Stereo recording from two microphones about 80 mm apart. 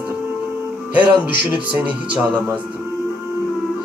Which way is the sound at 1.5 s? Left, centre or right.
Centre.